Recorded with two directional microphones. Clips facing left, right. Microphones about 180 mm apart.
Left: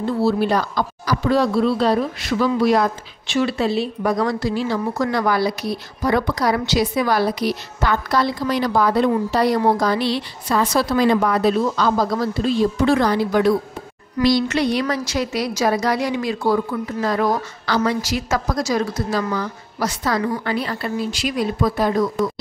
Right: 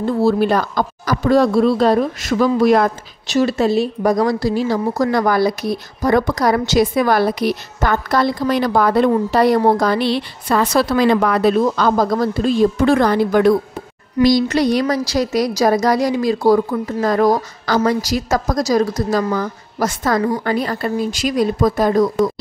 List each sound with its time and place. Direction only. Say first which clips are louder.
0.0 s speech: right 3 dB; 50° right (ahead or behind)
11.6 s speech: right 3 dB; 50° right (ahead or behind)
14.2 s a woman's voice: right 4 dB; 40° right (ahead or behind)